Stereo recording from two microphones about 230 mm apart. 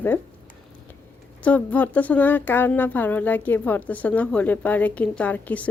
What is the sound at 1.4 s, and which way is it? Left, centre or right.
Speech, centre.